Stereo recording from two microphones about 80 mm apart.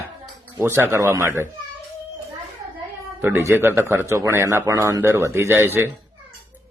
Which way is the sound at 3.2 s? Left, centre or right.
Right.